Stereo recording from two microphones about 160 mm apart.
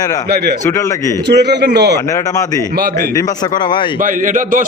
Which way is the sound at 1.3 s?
90° right.